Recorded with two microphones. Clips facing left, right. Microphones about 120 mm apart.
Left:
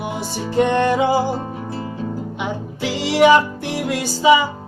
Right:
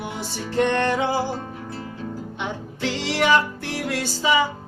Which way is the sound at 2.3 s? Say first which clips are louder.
Left 5 dB; 10° left (ahead or behind).